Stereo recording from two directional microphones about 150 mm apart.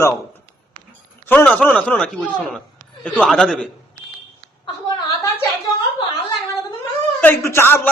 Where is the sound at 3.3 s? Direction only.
5° left (ahead or behind).